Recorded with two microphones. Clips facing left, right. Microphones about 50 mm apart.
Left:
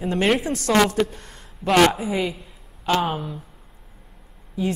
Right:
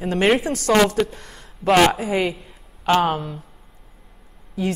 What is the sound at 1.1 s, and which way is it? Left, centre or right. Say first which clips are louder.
Speech: right 2 dB; right.